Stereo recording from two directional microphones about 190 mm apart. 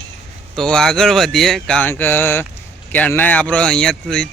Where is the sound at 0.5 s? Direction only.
5° left (ahead or behind).